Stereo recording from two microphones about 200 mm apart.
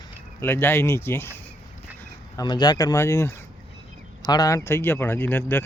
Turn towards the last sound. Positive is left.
turn(degrees=10)  # may be behind; listen again after turning